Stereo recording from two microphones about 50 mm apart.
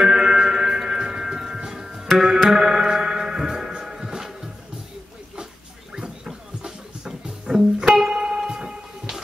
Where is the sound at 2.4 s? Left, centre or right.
Centre.